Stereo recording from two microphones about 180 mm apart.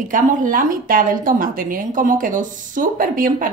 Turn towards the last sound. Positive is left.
turn(degrees=-50)  # may be behind; listen again after turning